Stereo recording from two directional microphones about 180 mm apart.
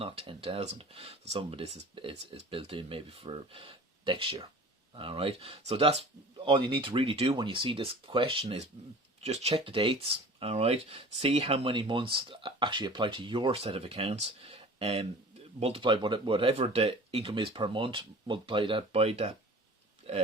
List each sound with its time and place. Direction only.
0.0 s speech: 30° right (ahead or behind)